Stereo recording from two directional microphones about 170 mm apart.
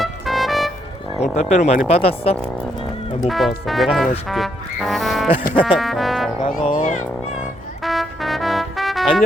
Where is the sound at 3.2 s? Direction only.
Centre (ahead or behind).